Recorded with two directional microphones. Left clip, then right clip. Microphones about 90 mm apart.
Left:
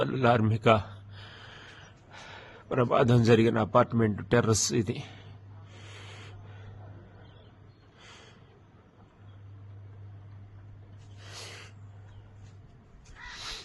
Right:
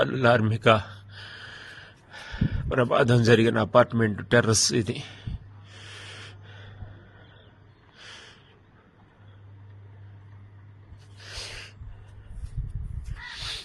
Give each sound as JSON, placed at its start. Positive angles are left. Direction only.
{"t": 0.0, "sound": "a sound", "side_deg": -5}
{"t": 4.0, "sound": "speech", "side_deg": -10}
{"t": 5.7, "sound": "rub", "side_deg": -15}
{"t": 8.0, "sound": "snort", "side_deg": -20}
{"t": 11.2, "sound": "snort", "side_deg": -10}
{"t": 13.1, "sound": "snake", "side_deg": 0}